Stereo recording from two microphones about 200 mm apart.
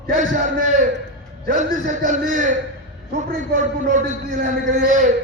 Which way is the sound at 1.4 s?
40° right (ahead or behind).